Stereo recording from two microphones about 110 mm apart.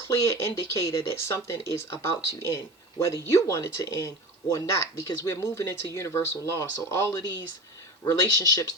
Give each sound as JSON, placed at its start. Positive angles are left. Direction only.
{"t": 0.2, "sound": "speech", "side_deg": 25}